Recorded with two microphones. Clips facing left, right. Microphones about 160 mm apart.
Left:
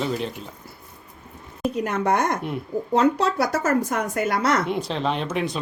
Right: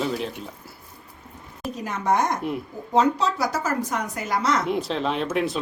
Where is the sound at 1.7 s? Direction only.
65° left (ahead or behind).